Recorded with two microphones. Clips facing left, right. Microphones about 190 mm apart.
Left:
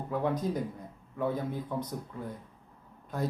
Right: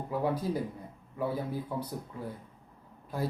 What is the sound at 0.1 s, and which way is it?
Speech, 5° right (ahead or behind).